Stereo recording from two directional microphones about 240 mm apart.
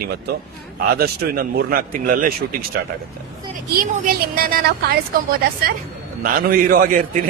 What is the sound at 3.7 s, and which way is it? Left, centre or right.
A man's voice, right.